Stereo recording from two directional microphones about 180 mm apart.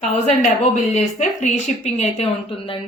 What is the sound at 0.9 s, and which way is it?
A woman's voice, 40° left (ahead or behind).